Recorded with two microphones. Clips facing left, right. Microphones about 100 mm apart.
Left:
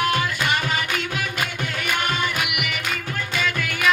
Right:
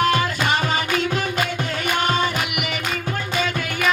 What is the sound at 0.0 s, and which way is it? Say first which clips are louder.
Music: right 3 dB; 25° right (ahead or behind).